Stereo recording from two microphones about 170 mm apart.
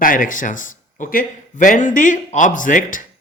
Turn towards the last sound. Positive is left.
turn(degrees=50)  # may be behind; listen again after turning